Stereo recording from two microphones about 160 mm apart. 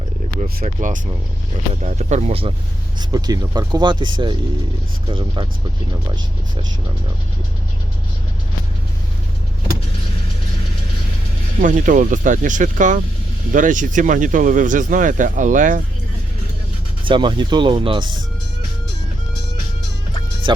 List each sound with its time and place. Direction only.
0.6 s speech: 50° right (ahead or behind)
3.0 s speech: 25° right (ahead or behind)
11.6 s speech: 55° right (ahead or behind)
17.1 s speech: 30° right (ahead or behind)